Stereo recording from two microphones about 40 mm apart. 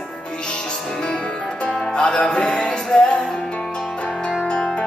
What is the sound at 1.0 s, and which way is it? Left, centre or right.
Music, left.